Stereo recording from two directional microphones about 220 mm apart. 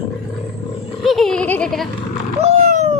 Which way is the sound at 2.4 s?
30° right (ahead or behind).